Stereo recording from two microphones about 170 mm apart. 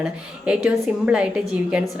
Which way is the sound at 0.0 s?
5° right (ahead or behind).